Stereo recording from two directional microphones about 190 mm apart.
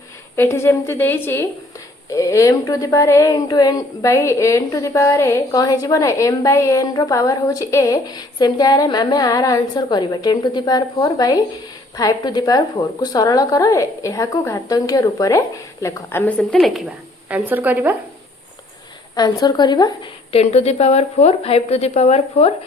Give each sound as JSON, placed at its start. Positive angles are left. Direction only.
{"t": 0.3, "sound": "a woman's voice", "side_deg": 15}
{"t": 19.1, "sound": "a woman's voice", "side_deg": 20}